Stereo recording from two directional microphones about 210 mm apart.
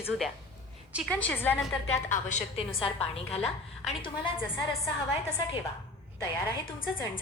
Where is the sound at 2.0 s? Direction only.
35° left (ahead or behind).